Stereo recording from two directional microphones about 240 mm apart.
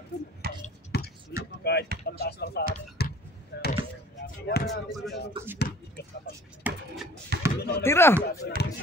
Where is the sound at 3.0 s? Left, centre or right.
Left.